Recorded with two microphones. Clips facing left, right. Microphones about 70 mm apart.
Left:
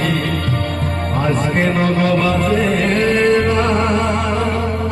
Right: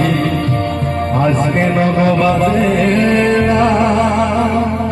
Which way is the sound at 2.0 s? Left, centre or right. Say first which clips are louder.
Right 4 dB; right.